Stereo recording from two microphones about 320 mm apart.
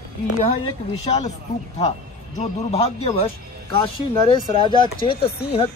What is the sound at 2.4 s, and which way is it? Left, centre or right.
Speech, centre.